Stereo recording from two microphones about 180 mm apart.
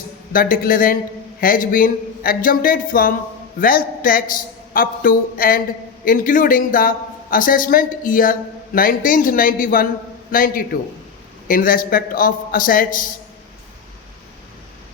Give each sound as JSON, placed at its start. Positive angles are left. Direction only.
{"t": 0.3, "sound": "speech", "side_deg": 50}